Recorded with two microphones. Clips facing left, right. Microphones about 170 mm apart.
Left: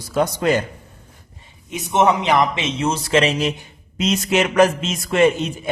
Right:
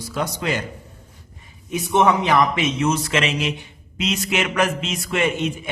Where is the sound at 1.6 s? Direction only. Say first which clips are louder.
Even; 20° left (ahead or behind).